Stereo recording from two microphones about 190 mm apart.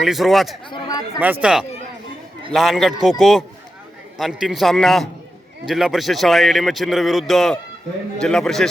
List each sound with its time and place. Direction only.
0.0 s a man's voice: centre (ahead or behind)
0.7 s chatter: 20° left (ahead or behind)
1.2 s a man's voice: 5° right (ahead or behind)